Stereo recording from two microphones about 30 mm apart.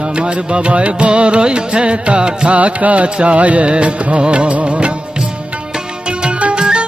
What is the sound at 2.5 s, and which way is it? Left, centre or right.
Music, right.